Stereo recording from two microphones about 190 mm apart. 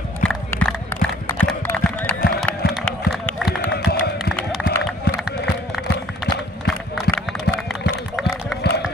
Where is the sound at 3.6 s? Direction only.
60° left (ahead or behind).